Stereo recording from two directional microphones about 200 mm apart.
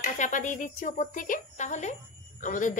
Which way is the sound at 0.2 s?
40° left (ahead or behind).